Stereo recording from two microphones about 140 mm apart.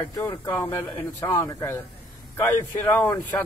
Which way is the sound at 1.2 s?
20° left (ahead or behind).